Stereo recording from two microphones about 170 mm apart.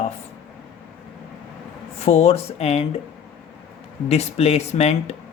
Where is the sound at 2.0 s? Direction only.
35° left (ahead or behind).